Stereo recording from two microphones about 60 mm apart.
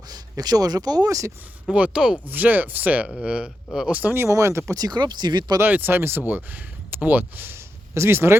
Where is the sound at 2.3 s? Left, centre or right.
Right.